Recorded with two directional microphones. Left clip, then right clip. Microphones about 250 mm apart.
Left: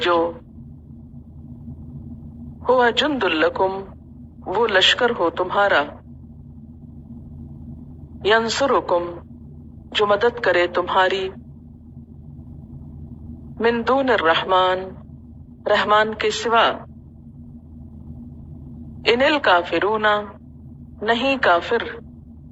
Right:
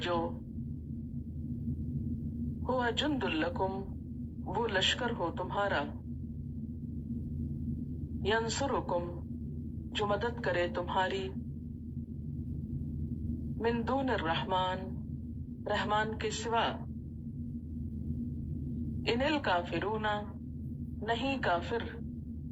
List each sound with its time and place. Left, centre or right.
0.0 s a man's voice: left
2.6 s a man's voice: left
8.2 s a man's voice: left
13.6 s a man's voice: left
19.0 s a man's voice: left